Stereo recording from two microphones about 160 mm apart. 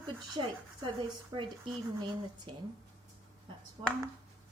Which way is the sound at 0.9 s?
30° right (ahead or behind).